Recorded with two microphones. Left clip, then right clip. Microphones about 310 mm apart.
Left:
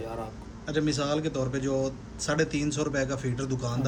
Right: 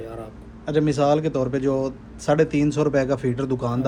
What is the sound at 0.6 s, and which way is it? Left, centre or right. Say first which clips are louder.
A man's voice: right 9 dB; centre.